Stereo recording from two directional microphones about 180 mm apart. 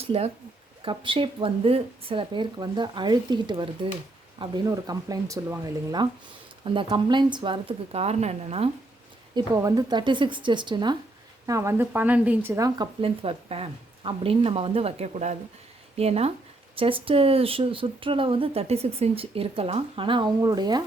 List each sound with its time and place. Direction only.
0.1 s speech: 35° right (ahead or behind)
9.3 s a woman's voice: 20° right (ahead or behind)
13.0 s speech: 30° right (ahead or behind)